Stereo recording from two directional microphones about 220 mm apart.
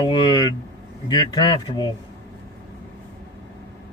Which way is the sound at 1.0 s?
20° left (ahead or behind).